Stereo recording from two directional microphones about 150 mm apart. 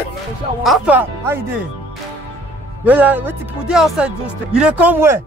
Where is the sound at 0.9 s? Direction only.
15° right (ahead or behind).